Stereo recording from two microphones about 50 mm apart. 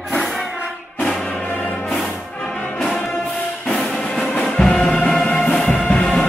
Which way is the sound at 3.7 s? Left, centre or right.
Centre.